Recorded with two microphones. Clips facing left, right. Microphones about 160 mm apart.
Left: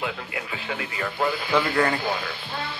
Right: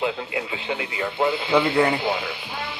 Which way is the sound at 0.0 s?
20° right (ahead or behind).